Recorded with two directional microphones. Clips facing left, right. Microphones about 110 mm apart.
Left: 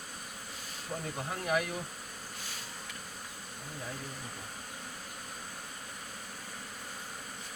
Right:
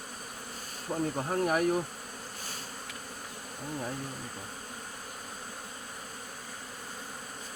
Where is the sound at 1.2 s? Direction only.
40° right (ahead or behind).